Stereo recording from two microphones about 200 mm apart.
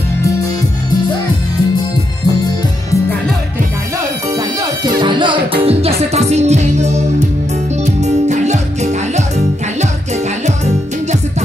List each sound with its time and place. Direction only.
5.0 s music: 25° right (ahead or behind)